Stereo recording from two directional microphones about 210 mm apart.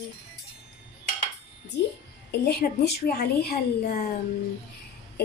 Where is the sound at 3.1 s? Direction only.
45° left (ahead or behind).